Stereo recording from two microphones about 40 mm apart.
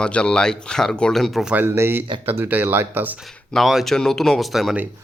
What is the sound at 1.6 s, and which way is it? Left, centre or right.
Speech, right.